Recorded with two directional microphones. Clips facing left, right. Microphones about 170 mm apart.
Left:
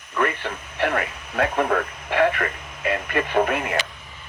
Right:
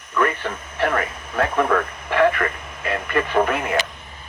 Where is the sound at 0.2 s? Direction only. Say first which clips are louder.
Right 2 dB; 45° right (ahead or behind).